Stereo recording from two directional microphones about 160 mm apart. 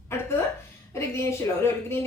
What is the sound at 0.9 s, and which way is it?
A woman's voice, 15° left (ahead or behind).